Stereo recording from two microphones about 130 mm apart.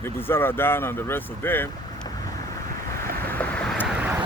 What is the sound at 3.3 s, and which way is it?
Vehicle, 10° left (ahead or behind).